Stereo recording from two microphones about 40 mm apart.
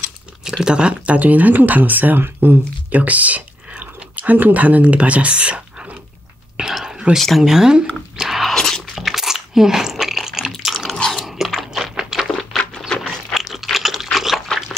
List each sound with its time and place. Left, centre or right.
0.5 s speech: centre
1.1 s speech: right
2.9 s a sound: right
4.8 s speech: right
6.6 s whispering: right
7.2 s speech: centre
7.4 s speech: centre
8.2 s biting: centre
8.5 s biting: centre
8.9 s biting: centre
10.7 s dog: centre
13.3 s crunch: centre
14.1 s dog: centre